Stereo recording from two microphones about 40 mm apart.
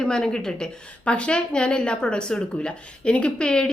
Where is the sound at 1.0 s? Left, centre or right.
Left.